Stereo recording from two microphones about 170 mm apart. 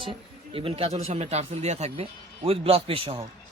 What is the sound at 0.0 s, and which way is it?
Speech, 30° right (ahead or behind).